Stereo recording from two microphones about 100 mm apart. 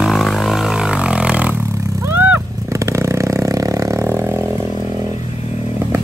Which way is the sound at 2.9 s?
30° right (ahead or behind).